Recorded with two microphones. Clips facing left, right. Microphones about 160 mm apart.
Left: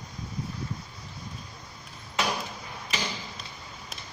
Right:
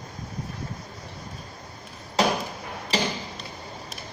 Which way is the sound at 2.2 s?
35° right (ahead or behind).